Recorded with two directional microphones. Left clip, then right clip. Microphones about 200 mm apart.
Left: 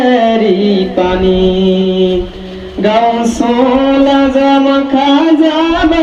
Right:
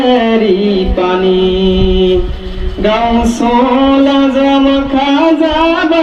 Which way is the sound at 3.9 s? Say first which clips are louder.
Left 1 dB; 50° left (ahead or behind).